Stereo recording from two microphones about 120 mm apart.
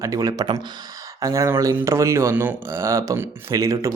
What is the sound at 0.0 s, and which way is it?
Speech, 30° right (ahead or behind).